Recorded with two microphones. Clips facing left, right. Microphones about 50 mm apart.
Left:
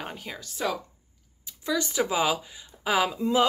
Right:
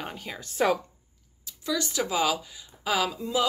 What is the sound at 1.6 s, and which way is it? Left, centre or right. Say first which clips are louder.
A woman's voice: left 2 dB; centre.